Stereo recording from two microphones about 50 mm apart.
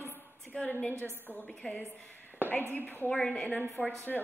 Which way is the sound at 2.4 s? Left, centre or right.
Left.